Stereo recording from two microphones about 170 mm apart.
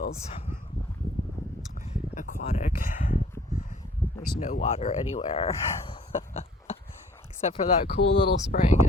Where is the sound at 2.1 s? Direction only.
45° left (ahead or behind).